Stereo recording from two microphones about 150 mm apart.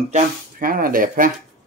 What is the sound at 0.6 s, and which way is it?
Speech, 70° right (ahead or behind).